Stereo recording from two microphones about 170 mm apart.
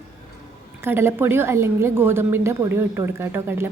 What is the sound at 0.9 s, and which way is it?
Speech, 15° right (ahead or behind).